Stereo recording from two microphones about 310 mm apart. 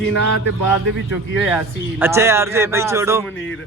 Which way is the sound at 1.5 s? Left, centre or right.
Centre.